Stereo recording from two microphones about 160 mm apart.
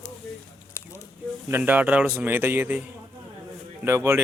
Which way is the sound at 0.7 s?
15° left (ahead or behind).